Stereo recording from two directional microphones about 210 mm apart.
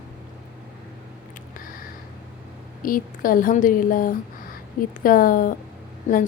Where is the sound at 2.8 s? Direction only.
40° left (ahead or behind).